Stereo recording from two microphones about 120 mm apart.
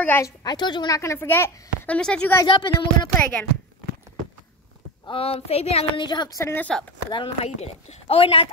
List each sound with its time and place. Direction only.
0.0 s a woman's voice: 15° left (ahead or behind)
0.4 s a woman's voice: 35° left (ahead or behind); by 2.0 s 20° left (ahead or behind)
2.0 s a woman's voice: 10° left (ahead or behind)
2.4 s speech: 45° left (ahead or behind)
5.0 s speech: 50° left (ahead or behind)
5.9 s speech: 35° left (ahead or behind)
6.7 s speech: 5° left (ahead or behind)
7.1 s speech: 40° left (ahead or behind)
7.4 s speech: 55° left (ahead or behind)